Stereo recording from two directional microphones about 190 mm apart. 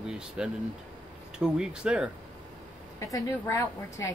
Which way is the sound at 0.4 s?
5° right (ahead or behind).